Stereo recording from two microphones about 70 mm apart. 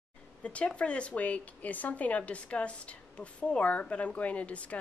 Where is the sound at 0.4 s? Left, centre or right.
Centre.